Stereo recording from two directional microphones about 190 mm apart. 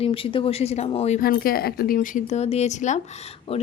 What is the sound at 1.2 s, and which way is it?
Speech, 50° left (ahead or behind).